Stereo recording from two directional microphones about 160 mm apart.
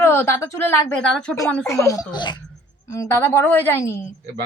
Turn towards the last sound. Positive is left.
turn(degrees=15)  # may be behind; listen again after turning